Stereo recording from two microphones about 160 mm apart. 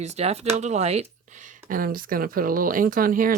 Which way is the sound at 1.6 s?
65° right (ahead or behind).